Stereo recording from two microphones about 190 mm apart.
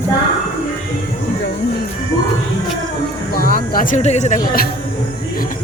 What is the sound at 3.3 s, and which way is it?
Speech, 50° left (ahead or behind).